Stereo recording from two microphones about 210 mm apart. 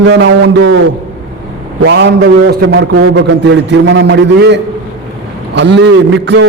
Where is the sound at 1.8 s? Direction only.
55° right (ahead or behind).